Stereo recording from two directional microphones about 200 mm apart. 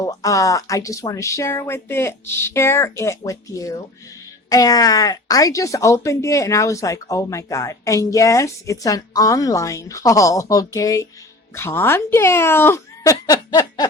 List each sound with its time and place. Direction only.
0.0 s speech: 15° left (ahead or behind)